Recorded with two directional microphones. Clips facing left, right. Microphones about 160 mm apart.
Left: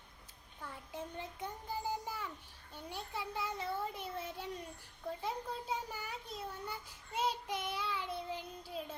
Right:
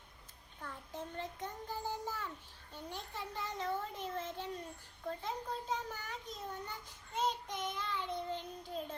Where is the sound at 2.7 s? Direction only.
10° left (ahead or behind).